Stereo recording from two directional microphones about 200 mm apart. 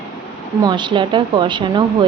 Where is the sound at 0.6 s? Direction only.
25° right (ahead or behind).